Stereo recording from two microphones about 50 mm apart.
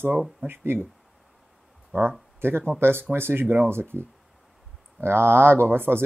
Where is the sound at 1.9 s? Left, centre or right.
Right.